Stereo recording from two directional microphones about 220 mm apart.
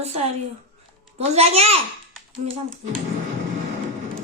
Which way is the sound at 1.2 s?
30° right (ahead or behind).